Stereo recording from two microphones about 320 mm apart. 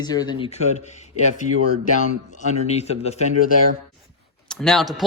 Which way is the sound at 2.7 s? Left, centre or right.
Centre.